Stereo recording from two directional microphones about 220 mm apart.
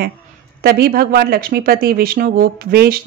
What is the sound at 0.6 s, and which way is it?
Speech, 45° right (ahead or behind).